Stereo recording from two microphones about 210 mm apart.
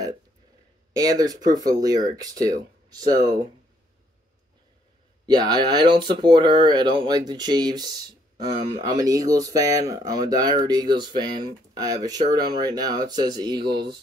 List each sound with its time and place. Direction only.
0.9 s speech: 15° right (ahead or behind)
5.2 s speech: 20° right (ahead or behind)